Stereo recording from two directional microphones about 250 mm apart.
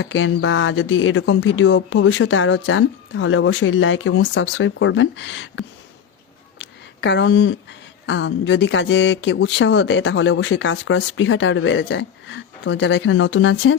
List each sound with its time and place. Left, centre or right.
0.0 s speech: left